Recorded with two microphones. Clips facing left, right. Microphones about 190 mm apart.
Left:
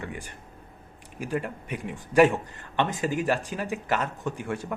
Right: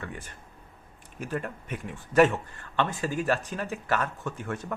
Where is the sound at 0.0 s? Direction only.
15° left (ahead or behind).